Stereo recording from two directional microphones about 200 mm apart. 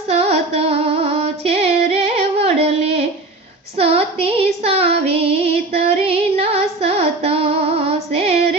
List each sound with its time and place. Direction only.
0.1 s music: 30° right (ahead or behind)
3.8 s female singing: 30° right (ahead or behind)